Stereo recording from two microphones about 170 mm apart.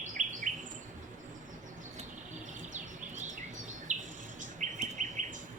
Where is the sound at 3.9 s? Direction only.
45° right (ahead or behind).